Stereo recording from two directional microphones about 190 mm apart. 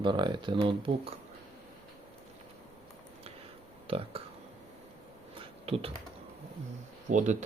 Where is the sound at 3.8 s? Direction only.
30° right (ahead or behind).